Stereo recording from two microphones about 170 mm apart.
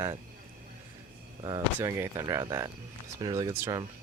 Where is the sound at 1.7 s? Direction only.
15° right (ahead or behind).